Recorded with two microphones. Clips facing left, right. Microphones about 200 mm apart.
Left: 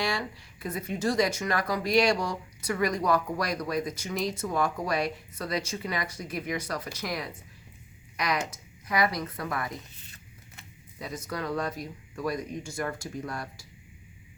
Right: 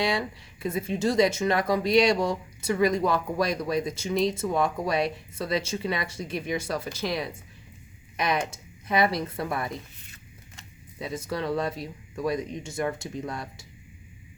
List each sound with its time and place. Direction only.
0.0 s speech: 20° right (ahead or behind)
11.0 s speech: 25° right (ahead or behind)